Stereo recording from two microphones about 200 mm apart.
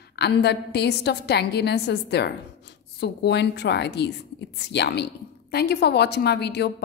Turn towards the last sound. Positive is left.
turn(degrees=55)  # may be behind; listen again after turning